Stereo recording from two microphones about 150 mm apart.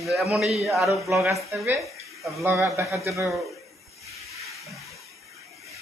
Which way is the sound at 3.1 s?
20° right (ahead or behind).